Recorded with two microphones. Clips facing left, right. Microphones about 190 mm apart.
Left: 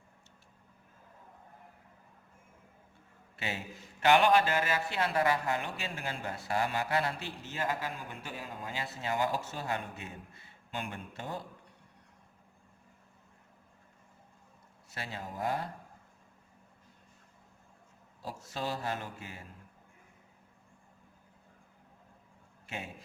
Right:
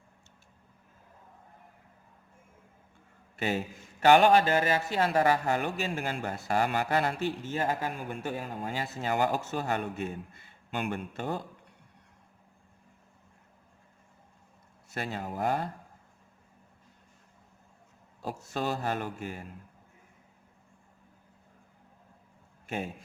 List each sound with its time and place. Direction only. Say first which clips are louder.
3.3 s a man's voice: right 8 dB; 45° right (ahead or behind)
10.7 s speech: right 7 dB; 65° right (ahead or behind)
14.9 s speech: right 6 dB; 50° right (ahead or behind)
18.2 s speech: right 5 dB; 50° right (ahead or behind)
22.6 s a man's voice: right 7 dB; 45° right (ahead or behind)